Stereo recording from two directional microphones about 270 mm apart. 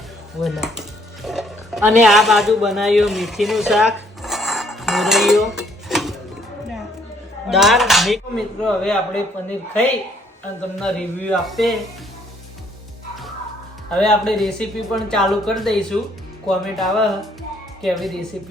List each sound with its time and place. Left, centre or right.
0.4 s speech: centre
7.5 s speech: centre
10.8 s speech: centre
13.9 s speech: centre